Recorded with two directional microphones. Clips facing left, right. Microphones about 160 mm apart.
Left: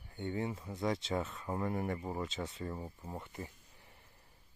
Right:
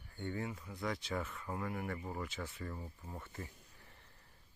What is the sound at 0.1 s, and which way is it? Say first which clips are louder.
Speech: left 4 dB; 20° left (ahead or behind).